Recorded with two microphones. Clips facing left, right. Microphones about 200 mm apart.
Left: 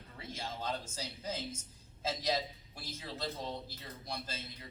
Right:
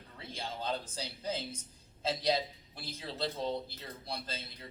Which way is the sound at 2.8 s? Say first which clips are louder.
Right 3 dB; 30° right (ahead or behind).